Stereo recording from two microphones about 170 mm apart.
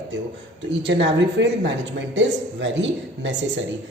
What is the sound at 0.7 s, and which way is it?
A man's voice, 90° right.